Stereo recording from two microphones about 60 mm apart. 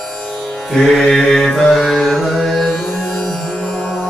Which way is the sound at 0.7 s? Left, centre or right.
Centre.